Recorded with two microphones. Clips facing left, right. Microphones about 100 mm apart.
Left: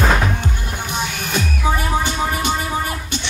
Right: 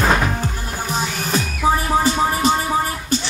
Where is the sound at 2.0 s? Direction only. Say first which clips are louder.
Right 4 dB; 35° right (ahead or behind).